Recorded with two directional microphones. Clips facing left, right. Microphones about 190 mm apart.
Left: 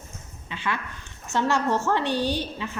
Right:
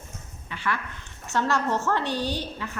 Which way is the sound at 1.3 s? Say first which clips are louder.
Left 2 dB; 15° left (ahead or behind).